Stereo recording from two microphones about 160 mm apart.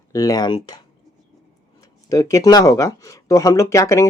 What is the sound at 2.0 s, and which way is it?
Speech, 20° left (ahead or behind).